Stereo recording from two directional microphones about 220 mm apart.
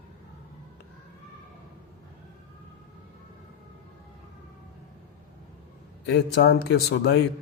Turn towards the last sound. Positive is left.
turn(degrees=50)  # may be behind; listen again after turning